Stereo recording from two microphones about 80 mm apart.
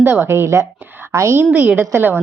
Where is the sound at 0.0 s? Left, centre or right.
Right.